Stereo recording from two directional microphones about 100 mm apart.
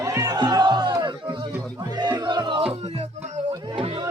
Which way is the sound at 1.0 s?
55° right (ahead or behind).